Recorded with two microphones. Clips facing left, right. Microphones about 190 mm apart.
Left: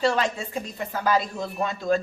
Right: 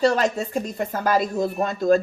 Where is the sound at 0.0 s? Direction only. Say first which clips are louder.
Right 4 dB; 40° right (ahead or behind).